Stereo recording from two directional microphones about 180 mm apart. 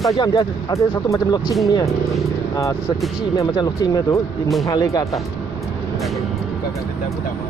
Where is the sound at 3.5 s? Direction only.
20° left (ahead or behind).